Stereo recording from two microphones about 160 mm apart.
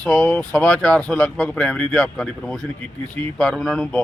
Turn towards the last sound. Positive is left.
turn(degrees=5)  # may be behind; listen again after turning